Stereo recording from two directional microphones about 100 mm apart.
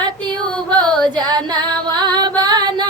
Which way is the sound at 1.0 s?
45° right (ahead or behind).